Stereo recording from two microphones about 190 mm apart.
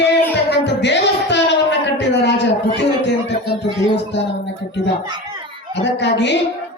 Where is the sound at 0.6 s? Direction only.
65° left (ahead or behind).